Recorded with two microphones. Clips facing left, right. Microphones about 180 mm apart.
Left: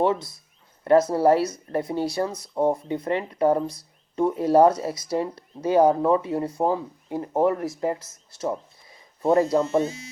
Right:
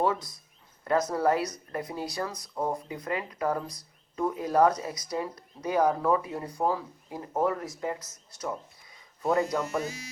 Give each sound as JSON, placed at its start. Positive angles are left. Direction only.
{"t": 0.0, "sound": "speech", "side_deg": 25}